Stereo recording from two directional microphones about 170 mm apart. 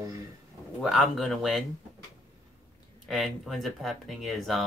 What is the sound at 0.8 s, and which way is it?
Speech, centre (ahead or behind).